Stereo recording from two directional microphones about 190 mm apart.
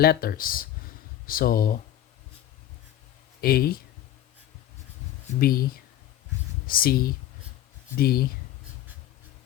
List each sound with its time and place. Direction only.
0.0 s speech: 55° left (ahead or behind)
3.4 s speech: 50° left (ahead or behind)
5.4 s speech: 50° left (ahead or behind)
6.7 s speech: 50° left (ahead or behind)